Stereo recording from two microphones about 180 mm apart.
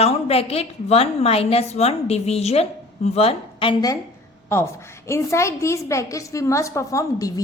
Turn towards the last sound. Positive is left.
turn(degrees=20)  # may be behind; listen again after turning